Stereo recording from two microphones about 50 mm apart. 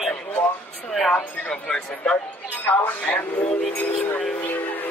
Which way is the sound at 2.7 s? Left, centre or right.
Left.